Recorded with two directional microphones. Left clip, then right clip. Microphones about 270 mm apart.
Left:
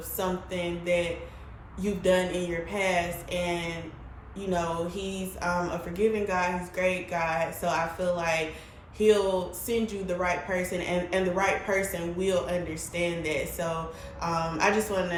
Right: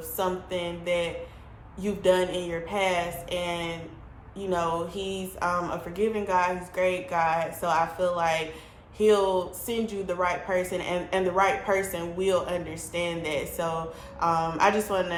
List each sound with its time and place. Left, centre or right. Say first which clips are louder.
0.2 s speech: right 2 dB; centre